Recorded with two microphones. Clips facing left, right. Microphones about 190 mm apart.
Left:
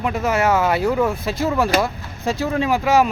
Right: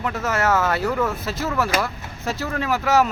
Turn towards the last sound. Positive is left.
turn(degrees=15)  # may be behind; listen again after turning